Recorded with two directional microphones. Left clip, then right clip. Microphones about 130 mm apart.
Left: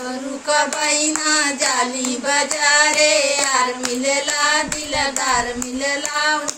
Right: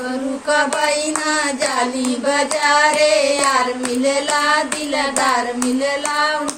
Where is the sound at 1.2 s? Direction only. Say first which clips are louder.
Left 2 dB; 30° left (ahead or behind).